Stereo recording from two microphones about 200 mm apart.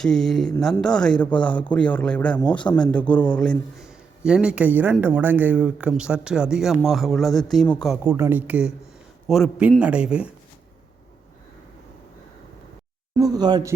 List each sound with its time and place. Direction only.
0.0 s a man's voice: centre (ahead or behind)
8.0 s a man's voice: 10° right (ahead or behind)
13.1 s speech: 20° right (ahead or behind)